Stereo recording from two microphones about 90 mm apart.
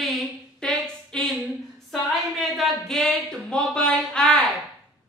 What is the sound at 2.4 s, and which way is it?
Speech, 5° left (ahead or behind).